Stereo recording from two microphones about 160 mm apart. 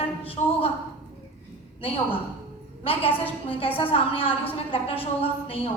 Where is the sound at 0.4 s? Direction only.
45° left (ahead or behind).